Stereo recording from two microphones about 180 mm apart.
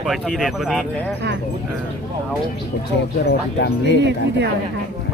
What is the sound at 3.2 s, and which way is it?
Speech, 65° left (ahead or behind).